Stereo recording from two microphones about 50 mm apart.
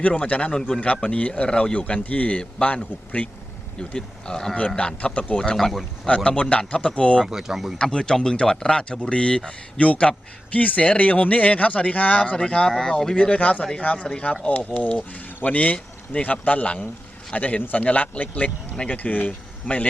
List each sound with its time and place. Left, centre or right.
0.0 s speech: left
3.8 s speech: centre
5.5 s speech: centre
6.1 s speech: left
7.3 s speech: centre
7.8 s speech: centre; by 19.8 s left